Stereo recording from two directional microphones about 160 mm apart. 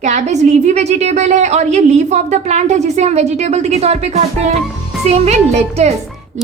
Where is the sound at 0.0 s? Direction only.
45° right (ahead or behind).